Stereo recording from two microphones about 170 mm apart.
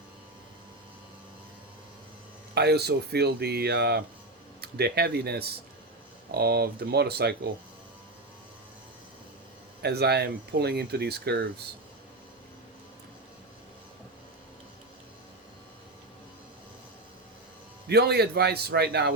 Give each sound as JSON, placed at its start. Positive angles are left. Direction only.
{"t": 2.6, "sound": "speech", "side_deg": -70}
{"t": 9.8, "sound": "speech", "side_deg": -70}
{"t": 17.8, "sound": "speech", "side_deg": -70}